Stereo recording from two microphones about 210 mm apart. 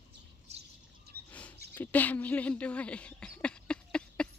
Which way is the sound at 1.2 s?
5° left (ahead or behind).